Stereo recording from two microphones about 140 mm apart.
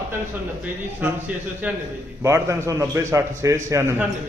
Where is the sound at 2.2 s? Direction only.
20° right (ahead or behind).